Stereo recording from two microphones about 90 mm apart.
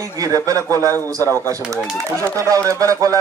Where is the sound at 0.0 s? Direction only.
40° right (ahead or behind).